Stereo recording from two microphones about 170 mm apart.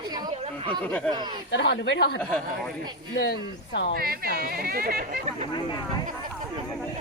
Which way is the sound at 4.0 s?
65° right (ahead or behind).